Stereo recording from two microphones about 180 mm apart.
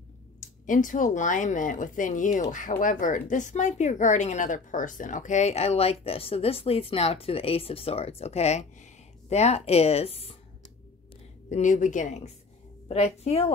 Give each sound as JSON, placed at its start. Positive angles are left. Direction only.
{"t": 0.4, "sound": "speech", "side_deg": 45}
{"t": 11.5, "sound": "speech", "side_deg": 45}